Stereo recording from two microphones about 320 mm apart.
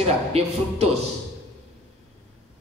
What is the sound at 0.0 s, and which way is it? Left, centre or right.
Speech, centre.